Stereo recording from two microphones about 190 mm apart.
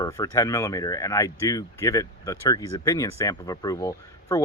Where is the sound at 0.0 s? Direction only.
15° left (ahead or behind).